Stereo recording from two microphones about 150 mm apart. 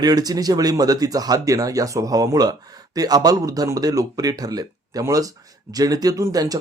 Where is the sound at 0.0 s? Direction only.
25° right (ahead or behind).